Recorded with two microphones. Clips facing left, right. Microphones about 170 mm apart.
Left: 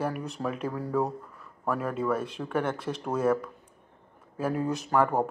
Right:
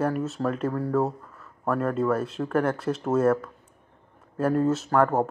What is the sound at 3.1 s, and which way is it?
Speech, 10° left (ahead or behind).